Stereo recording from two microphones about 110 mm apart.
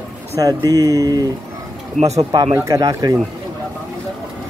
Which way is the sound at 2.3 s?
35° right (ahead or behind).